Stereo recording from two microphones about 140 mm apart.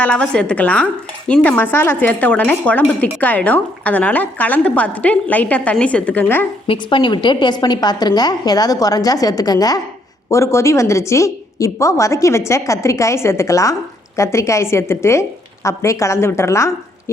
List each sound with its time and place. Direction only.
0.0 s speech: 10° left (ahead or behind)
6.7 s a woman's voice: 35° left (ahead or behind)